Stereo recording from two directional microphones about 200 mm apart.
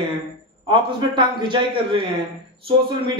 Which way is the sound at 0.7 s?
25° right (ahead or behind).